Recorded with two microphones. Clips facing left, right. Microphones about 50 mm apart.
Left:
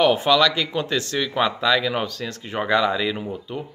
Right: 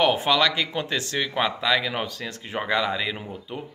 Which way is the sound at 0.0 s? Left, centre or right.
Centre.